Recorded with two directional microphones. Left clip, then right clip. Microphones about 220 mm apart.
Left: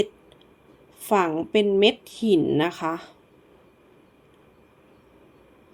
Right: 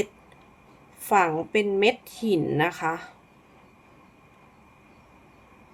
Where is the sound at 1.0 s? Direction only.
20° left (ahead or behind).